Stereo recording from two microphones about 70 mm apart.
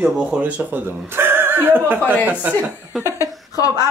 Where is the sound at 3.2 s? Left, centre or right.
Left.